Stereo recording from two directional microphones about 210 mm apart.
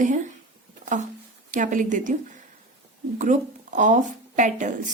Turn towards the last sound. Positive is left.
turn(degrees=-35)  # may be behind; listen again after turning